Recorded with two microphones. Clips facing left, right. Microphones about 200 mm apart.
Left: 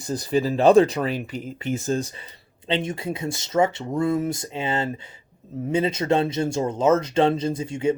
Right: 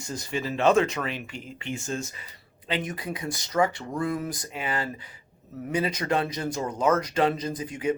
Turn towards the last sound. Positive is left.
turn(degrees=25)  # may be behind; listen again after turning